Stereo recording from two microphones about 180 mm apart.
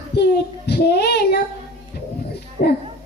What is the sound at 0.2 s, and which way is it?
Child singing, 65° left (ahead or behind).